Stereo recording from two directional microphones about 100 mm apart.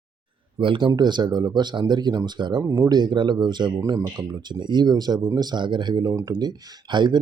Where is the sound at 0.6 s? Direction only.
55° right (ahead or behind).